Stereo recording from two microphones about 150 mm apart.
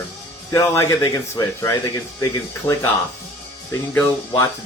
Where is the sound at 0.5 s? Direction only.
20° left (ahead or behind).